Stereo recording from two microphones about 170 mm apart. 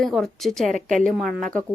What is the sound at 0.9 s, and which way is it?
Speech, 50° right (ahead or behind).